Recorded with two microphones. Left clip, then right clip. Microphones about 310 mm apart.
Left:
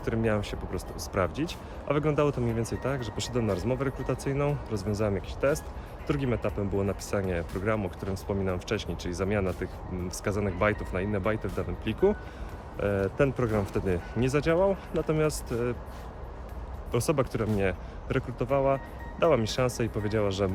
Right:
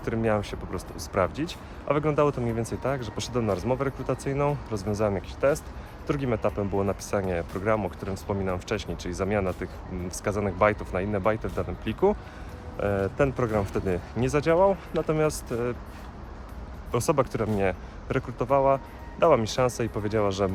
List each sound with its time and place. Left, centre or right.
0.0 s speech: centre
16.9 s speech: centre